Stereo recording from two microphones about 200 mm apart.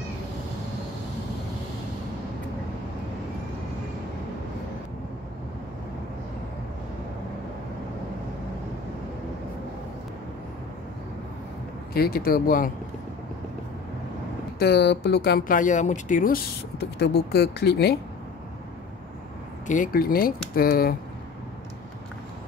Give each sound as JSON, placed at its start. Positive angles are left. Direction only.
{"t": 11.9, "sound": "speech", "side_deg": 50}
{"t": 14.6, "sound": "speech", "side_deg": 55}
{"t": 19.7, "sound": "speech", "side_deg": 45}